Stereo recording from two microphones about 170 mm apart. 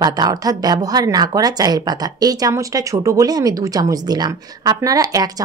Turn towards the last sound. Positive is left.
turn(degrees=-20)  # may be behind; listen again after turning